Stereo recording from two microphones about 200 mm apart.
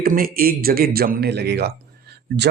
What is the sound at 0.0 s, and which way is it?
A man's voice, 50° right (ahead or behind).